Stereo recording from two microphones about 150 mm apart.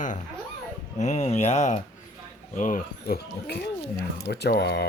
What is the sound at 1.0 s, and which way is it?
Speech, 50° left (ahead or behind).